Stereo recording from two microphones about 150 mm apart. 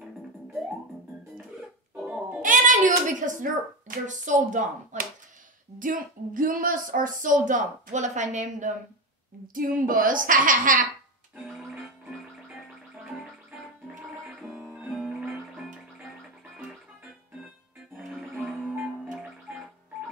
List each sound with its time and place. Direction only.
2.0 s music: 5° right (ahead or behind)
2.4 s a sound: 60° right (ahead or behind)
5.8 s speech: 65° right (ahead or behind)
9.5 s speech: 65° right (ahead or behind)
11.3 s music: centre (ahead or behind)
14.5 s music: 10° right (ahead or behind)
17.9 s music: centre (ahead or behind)